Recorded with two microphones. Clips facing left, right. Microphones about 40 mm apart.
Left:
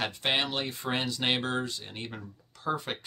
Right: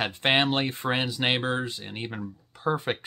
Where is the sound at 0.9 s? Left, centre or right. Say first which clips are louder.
Right 2 dB; centre.